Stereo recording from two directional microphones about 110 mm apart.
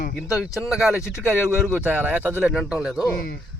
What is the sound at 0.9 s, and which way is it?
Speech, 25° left (ahead or behind).